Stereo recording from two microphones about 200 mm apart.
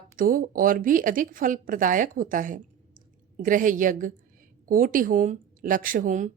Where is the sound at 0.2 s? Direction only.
45° right (ahead or behind).